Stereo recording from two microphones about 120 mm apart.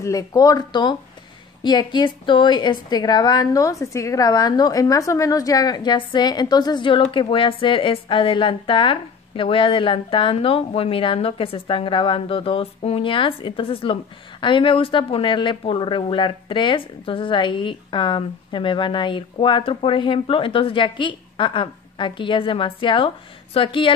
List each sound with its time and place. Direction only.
0.0 s a woman's voice: 30° left (ahead or behind); by 23.9 s 45° left (ahead or behind)